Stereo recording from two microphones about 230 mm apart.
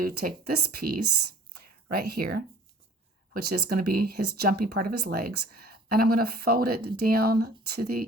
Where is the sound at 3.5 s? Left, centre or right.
Right.